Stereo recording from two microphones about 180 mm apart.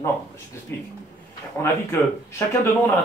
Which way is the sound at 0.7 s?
15° left (ahead or behind).